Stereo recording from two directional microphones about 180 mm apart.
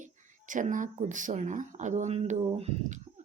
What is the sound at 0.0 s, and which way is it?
Speech, 45° right (ahead or behind).